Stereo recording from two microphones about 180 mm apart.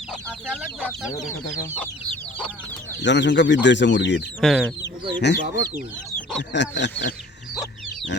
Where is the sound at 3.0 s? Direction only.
80° left.